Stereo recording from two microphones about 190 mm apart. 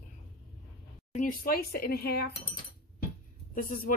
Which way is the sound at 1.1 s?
45° left (ahead or behind).